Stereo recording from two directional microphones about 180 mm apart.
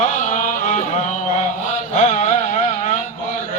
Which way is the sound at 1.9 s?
40° left (ahead or behind).